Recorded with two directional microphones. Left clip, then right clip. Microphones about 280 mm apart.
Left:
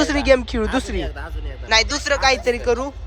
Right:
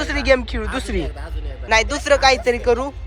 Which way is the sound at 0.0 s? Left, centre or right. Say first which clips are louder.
Left 1 dB; centre.